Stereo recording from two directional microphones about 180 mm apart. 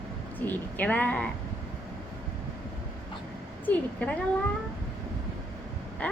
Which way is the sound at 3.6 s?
10° left (ahead or behind).